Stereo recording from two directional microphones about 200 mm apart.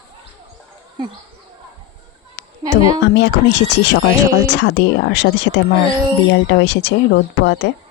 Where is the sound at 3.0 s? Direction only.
60° left (ahead or behind).